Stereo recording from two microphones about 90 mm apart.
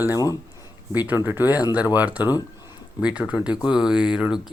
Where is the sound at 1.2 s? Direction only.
20° right (ahead or behind).